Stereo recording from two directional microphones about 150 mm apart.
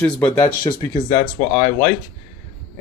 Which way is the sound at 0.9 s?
65° left (ahead or behind).